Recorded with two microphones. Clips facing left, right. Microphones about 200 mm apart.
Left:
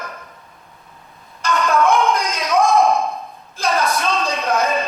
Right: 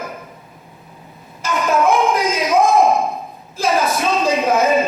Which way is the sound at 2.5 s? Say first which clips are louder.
Right 1 dB; 5° right (ahead or behind).